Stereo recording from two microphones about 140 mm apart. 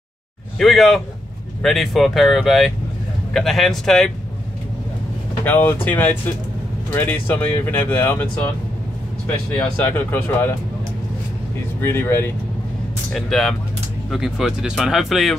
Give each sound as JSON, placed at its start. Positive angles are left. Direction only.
{"t": 0.6, "sound": "speech", "side_deg": 0}
{"t": 5.4, "sound": "speech", "side_deg": 15}
{"t": 9.6, "sound": "speech", "side_deg": 15}
{"t": 11.8, "sound": "speech", "side_deg": 15}
{"t": 13.1, "sound": "speech", "side_deg": 5}